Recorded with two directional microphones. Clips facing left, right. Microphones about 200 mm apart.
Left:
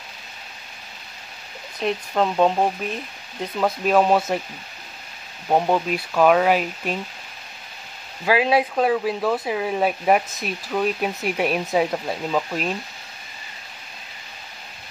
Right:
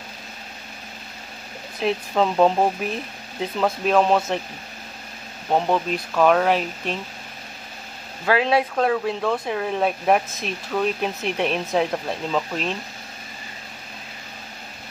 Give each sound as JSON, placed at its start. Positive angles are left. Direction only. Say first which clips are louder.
{"t": 1.8, "sound": "speech", "louder": "right 1 dB", "side_deg": 0}
{"t": 5.5, "sound": "speech", "louder": "left 1 dB", "side_deg": 10}
{"t": 8.3, "sound": "speech", "louder": "left 1 dB", "side_deg": 5}